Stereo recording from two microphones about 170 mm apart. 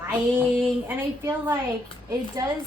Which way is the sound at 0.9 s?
15° right (ahead or behind).